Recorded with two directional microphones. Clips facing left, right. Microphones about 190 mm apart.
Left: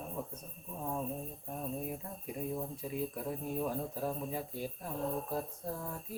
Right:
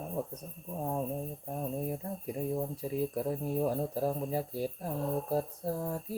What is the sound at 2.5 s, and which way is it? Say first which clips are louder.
Speech: right 5 dB; 35° right (ahead or behind).